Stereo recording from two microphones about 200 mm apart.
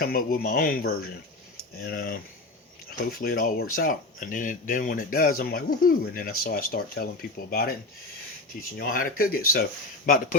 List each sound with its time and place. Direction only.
0.0 s speech: 45° left (ahead or behind)
8.8 s speech: 45° left (ahead or behind)